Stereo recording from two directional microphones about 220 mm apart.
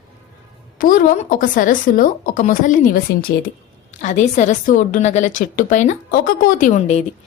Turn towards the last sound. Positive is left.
turn(degrees=30)  # may be behind; listen again after turning